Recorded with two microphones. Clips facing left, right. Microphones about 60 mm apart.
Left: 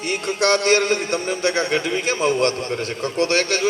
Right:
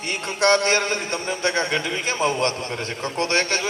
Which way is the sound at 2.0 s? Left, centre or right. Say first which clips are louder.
Left 3 dB; right.